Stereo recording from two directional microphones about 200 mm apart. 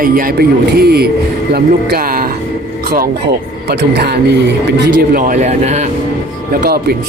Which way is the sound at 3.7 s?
55° right (ahead or behind).